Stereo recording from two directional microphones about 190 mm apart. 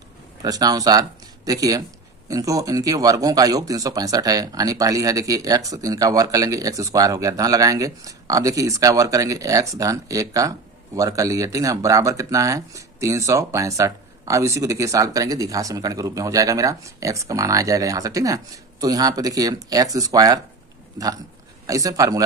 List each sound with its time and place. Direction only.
0.4 s speech: 20° right (ahead or behind)
21.6 s speech: 15° right (ahead or behind)